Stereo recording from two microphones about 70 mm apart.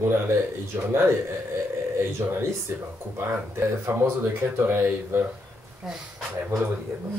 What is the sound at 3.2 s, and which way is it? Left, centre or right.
Speech, right.